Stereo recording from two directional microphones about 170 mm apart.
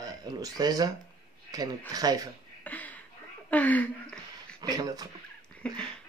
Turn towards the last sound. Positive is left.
turn(degrees=5)  # may be behind; listen again after turning